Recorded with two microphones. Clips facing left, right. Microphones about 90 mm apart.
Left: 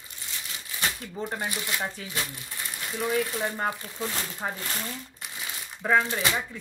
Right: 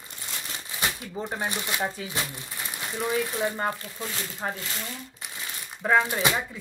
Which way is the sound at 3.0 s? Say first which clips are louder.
Even; 5° right (ahead or behind).